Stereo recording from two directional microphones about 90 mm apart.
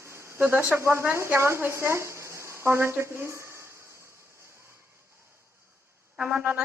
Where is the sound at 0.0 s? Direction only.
30° right (ahead or behind).